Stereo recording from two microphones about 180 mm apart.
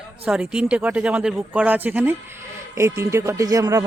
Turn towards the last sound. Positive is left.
turn(degrees=-20)  # may be behind; listen again after turning